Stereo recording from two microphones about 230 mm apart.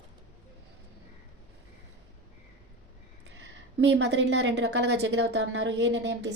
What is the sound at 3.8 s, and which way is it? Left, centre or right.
Speech, right.